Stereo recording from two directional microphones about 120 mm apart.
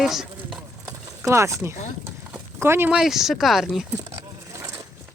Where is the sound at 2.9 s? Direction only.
5° right (ahead or behind).